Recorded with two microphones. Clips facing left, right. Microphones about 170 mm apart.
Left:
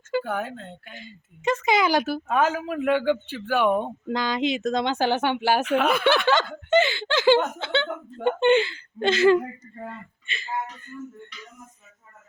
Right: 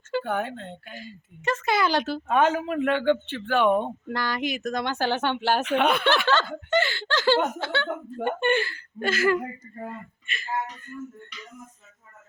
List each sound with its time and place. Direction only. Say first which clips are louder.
0.1 s speech: even; 5° left (ahead or behind)
1.0 s speech: left 3 dB; 20° left (ahead or behind); by 6.1 s centre (ahead or behind)
6.2 s speech: left 2 dB; 15° left (ahead or behind)